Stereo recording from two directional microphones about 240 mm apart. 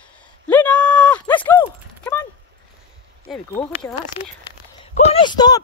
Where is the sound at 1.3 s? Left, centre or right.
Centre.